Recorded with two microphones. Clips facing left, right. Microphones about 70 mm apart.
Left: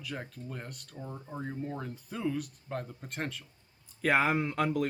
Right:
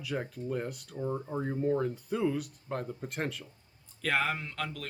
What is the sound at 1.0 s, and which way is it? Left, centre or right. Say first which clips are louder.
Speech: right 6 dB; centre.